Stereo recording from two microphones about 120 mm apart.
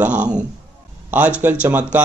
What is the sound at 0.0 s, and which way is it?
Speech, 10° right (ahead or behind).